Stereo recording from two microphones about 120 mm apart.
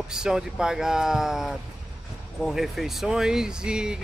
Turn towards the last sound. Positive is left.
turn(degrees=-5)  # may be behind; listen again after turning